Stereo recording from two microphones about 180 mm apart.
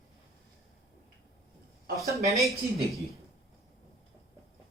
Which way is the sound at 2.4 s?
Centre (ahead or behind).